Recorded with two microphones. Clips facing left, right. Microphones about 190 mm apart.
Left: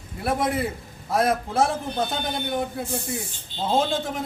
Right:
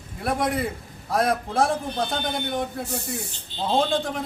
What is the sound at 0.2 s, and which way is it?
A man's voice, 5° left (ahead or behind).